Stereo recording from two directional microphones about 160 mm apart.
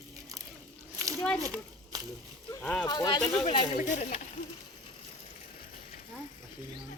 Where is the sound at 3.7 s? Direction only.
55° left (ahead or behind).